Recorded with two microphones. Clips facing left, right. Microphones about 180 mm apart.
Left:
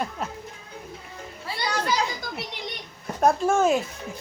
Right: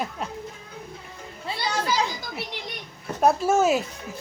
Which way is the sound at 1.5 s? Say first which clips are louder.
Right 1 dB; 25° right (ahead or behind).